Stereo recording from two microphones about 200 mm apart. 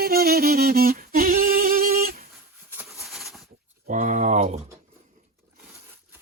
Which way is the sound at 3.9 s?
40° right (ahead or behind).